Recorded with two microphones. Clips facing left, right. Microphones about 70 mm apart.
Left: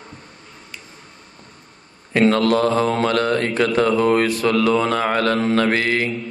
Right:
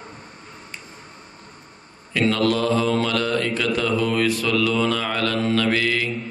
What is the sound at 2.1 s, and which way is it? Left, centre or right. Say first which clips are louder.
Mantra: left 4 dB; left.